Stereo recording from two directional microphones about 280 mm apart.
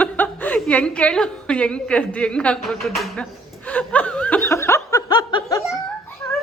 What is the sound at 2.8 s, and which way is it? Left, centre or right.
Speech, centre.